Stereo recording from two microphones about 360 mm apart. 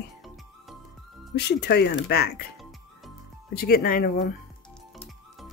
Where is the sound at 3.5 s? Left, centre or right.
Left.